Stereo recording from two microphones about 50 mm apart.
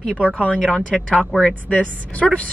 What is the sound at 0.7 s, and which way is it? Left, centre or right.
A woman's voice, centre.